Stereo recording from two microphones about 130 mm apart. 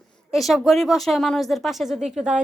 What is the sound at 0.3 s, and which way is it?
Speech, centre (ahead or behind).